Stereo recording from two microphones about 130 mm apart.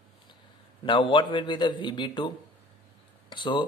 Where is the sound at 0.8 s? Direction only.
40° left (ahead or behind).